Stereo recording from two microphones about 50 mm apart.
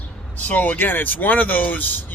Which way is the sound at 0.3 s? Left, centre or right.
Left.